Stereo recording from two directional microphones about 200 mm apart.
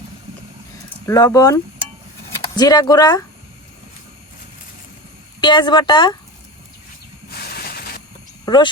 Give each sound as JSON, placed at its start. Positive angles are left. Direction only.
{"t": 1.0, "sound": "speech", "side_deg": 15}
{"t": 2.6, "sound": "speech", "side_deg": 20}
{"t": 5.4, "sound": "speech", "side_deg": 25}
{"t": 7.5, "sound": "a sound", "side_deg": 50}
{"t": 8.4, "sound": "speech", "side_deg": 20}